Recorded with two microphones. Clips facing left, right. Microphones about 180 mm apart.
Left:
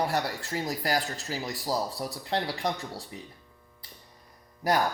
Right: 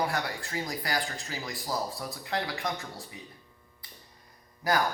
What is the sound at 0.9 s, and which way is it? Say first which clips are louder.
Speech: left 3 dB; 35° left (ahead or behind).